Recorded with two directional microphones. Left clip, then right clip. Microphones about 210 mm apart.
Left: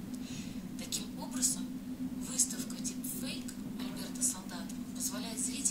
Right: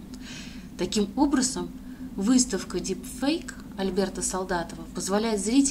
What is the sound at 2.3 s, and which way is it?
A woman's voice, 5° left (ahead or behind).